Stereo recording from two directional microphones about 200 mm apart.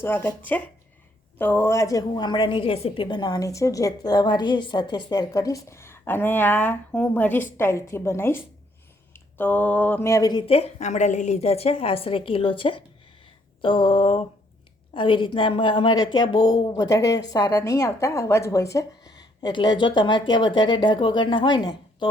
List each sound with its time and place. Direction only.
0.0 s a woman's voice: 10° left (ahead or behind)